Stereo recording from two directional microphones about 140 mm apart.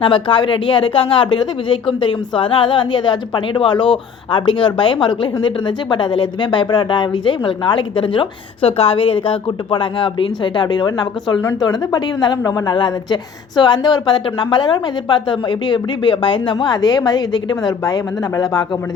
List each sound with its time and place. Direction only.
0.0 s speech: 35° left (ahead or behind)